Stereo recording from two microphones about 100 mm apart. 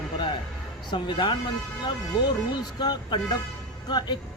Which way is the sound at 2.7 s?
45° left (ahead or behind).